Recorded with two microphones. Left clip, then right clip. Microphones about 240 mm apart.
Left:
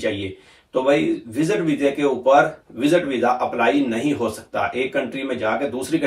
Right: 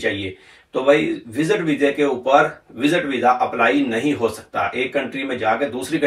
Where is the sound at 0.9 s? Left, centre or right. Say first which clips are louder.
Right 1 dB; centre.